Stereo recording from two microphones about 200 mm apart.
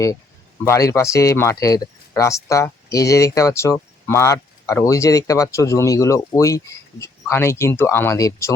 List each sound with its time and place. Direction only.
0.6 s speech: 15° left (ahead or behind)